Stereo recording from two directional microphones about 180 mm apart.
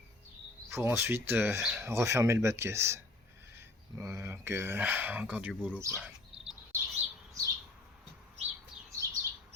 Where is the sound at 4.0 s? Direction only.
15° right (ahead or behind).